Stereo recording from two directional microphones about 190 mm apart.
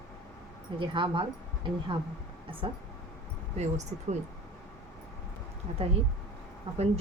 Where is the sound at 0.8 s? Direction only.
25° right (ahead or behind).